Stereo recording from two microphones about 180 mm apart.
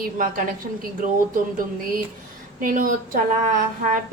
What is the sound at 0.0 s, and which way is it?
A woman's voice, 50° right (ahead or behind).